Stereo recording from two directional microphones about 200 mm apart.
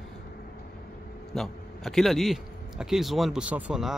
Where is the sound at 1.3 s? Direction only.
Centre (ahead or behind).